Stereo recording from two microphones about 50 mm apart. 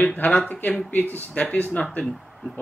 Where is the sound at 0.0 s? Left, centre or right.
Left.